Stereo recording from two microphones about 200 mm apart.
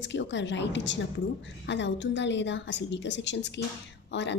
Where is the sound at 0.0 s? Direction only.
65° left (ahead or behind).